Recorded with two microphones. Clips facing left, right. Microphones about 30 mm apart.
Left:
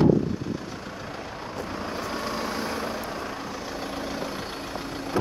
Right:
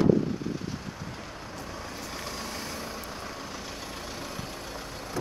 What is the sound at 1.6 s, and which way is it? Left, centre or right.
Vehicle, left.